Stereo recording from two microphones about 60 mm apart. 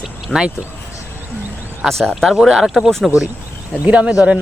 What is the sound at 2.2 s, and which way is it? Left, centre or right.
Speech, centre.